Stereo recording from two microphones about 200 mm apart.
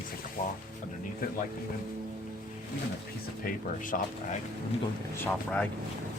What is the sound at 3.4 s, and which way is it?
Speech, 40° left (ahead or behind).